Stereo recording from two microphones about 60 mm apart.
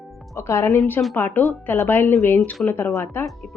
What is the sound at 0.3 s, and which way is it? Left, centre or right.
Speech, left.